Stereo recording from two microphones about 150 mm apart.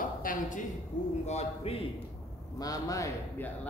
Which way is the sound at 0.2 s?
60° left (ahead or behind).